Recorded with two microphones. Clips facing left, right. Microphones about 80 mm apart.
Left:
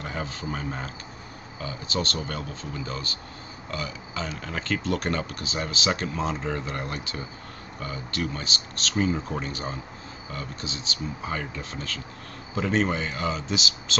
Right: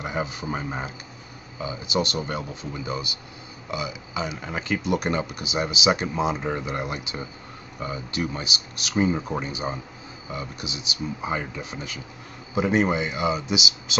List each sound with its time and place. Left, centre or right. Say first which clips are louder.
0.0 s speech: right 4 dB; centre